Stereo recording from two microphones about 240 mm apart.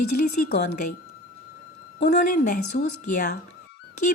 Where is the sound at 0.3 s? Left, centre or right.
Left.